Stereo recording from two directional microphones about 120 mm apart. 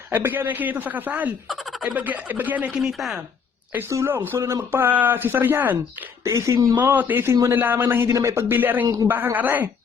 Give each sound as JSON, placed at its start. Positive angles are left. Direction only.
{"t": 0.1, "sound": "speech", "side_deg": -15}
{"t": 3.7, "sound": "speech", "side_deg": -20}
{"t": 6.7, "sound": "speech", "side_deg": -15}